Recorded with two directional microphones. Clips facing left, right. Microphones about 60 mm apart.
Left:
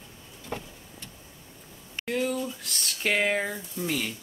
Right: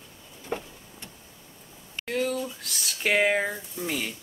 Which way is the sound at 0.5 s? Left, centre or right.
Centre.